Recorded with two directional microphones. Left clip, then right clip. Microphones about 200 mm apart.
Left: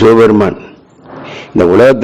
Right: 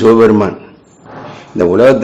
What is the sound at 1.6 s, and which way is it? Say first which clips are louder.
Speech: left 2 dB; 35° left (ahead or behind).